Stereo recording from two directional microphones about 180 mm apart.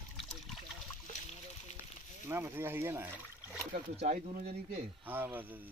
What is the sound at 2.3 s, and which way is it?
Speech, 15° right (ahead or behind).